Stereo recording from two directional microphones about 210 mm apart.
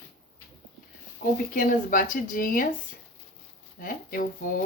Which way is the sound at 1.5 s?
40° left (ahead or behind).